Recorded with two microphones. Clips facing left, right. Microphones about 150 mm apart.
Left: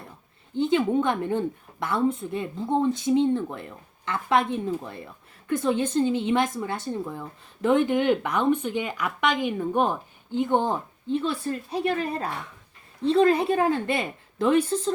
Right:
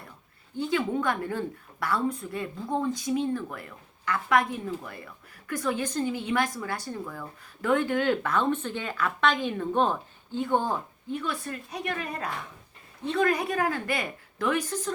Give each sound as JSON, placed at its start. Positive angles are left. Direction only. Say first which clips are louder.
{"t": 0.5, "sound": "a woman's voice", "louder": "left 5 dB", "side_deg": 25}